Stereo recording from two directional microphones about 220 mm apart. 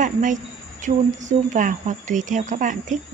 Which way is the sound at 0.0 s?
35° right (ahead or behind).